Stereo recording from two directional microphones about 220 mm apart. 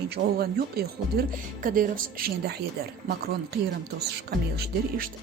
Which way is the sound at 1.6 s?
40° right (ahead or behind).